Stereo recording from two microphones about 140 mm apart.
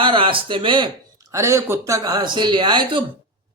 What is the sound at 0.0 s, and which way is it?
Speech, 35° right (ahead or behind).